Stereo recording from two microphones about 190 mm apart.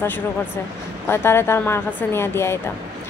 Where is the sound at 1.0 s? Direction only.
10° left (ahead or behind).